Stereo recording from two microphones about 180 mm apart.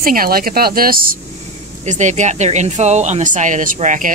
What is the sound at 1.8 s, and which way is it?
Speech, 40° right (ahead or behind).